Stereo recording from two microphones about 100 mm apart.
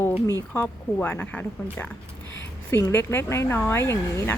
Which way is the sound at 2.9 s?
25° left (ahead or behind).